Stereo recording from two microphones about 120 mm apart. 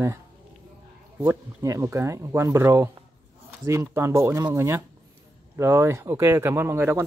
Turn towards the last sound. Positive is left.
turn(degrees=-20)  # may be behind; listen again after turning